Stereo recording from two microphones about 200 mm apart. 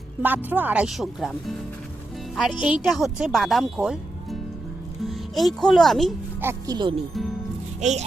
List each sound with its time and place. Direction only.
0.2 s a child's voice: 10° right (ahead or behind)
6.4 s speech: 15° right (ahead or behind)
7.8 s speech: 35° right (ahead or behind)